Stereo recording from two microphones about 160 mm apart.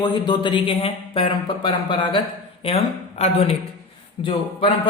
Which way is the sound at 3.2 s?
40° left (ahead or behind).